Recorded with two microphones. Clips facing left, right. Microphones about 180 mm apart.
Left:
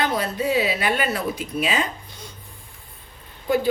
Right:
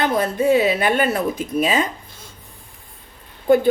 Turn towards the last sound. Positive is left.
turn(degrees=-50)  # may be behind; listen again after turning